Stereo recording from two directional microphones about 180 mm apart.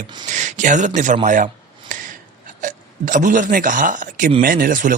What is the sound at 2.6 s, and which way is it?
Speech, 45° right (ahead or behind).